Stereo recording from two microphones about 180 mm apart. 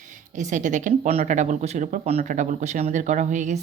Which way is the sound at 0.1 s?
45° right (ahead or behind).